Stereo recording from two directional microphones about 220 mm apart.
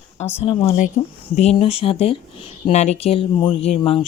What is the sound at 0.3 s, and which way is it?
Speech, 25° left (ahead or behind).